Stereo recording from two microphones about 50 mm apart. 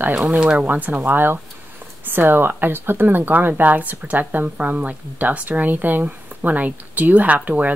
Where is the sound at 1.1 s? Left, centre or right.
Right.